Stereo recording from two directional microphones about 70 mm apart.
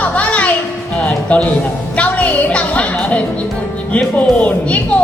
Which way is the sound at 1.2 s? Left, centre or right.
Centre.